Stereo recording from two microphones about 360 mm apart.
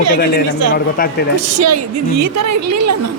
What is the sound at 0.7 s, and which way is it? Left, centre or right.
Speech, left.